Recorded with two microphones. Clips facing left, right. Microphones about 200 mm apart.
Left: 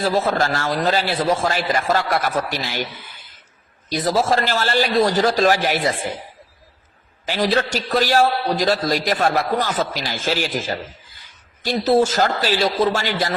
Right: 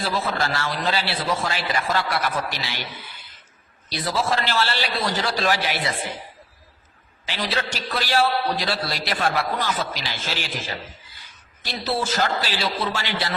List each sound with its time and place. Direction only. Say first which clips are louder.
0.0 s speech: left 6 dB; 45° left (ahead or behind)
3.8 s speech: left 6 dB; 45° left (ahead or behind)
7.3 s speech: left 8 dB; 45° left (ahead or behind)